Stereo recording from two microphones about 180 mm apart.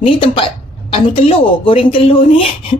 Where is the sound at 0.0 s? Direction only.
30° left (ahead or behind).